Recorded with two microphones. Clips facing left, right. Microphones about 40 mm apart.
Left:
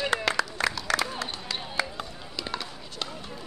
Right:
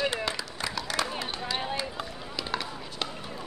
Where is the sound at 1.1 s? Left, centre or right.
Centre.